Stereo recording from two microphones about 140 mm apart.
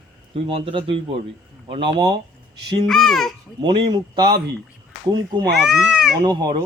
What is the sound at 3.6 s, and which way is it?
Speech, 35° right (ahead or behind).